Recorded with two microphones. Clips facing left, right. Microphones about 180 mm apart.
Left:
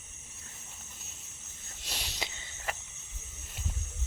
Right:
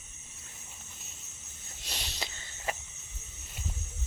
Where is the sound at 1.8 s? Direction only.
5° left (ahead or behind).